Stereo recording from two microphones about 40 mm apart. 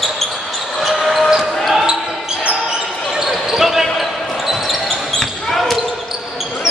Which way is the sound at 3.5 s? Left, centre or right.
Centre.